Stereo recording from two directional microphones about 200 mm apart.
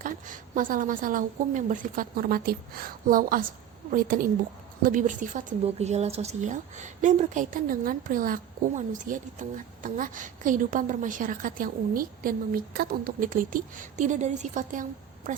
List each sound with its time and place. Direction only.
0.0 s a woman's voice: 40° right (ahead or behind)